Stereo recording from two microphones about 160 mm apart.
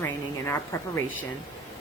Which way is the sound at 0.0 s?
15° left (ahead or behind).